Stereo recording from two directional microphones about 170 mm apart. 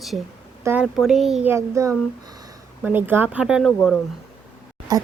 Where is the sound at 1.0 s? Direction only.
Centre (ahead or behind).